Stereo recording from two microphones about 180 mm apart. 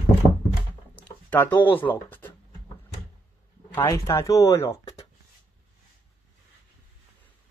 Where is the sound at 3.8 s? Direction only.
15° left (ahead or behind).